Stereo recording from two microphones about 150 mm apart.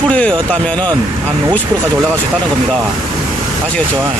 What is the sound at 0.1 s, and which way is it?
Speech, 5° left (ahead or behind).